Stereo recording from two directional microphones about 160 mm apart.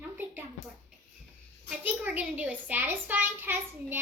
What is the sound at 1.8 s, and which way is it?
A child's voice, 10° right (ahead or behind).